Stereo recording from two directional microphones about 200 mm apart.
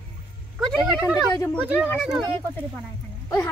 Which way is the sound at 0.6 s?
Centre (ahead or behind).